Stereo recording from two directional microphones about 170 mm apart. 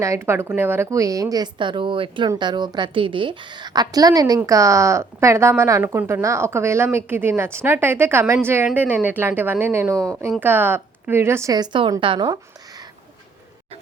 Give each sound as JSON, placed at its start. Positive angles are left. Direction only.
{"t": 0.0, "sound": "a woman's voice", "side_deg": -15}